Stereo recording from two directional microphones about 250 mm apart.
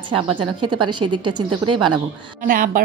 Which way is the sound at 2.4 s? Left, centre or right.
Right.